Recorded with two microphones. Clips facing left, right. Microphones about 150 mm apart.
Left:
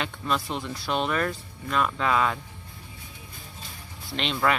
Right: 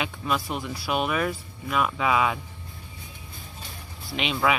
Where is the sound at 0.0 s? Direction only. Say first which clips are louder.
Right 1 dB; 10° right (ahead or behind).